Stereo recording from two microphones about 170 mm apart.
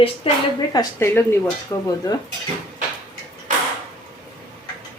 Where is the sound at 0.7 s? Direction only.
15° left (ahead or behind).